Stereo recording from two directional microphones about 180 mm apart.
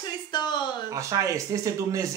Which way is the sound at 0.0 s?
25° left (ahead or behind).